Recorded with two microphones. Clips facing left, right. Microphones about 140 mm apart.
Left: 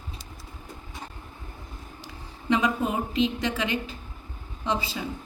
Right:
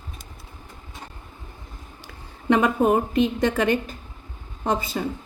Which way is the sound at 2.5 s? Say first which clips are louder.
Right 6 dB; 55° right (ahead or behind).